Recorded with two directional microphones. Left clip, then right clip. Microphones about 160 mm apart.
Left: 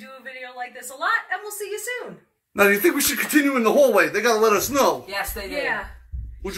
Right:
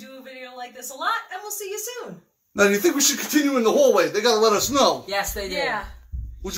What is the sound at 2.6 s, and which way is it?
Speech, 5° left (ahead or behind).